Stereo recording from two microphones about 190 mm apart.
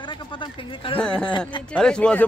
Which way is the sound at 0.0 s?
25° left (ahead or behind).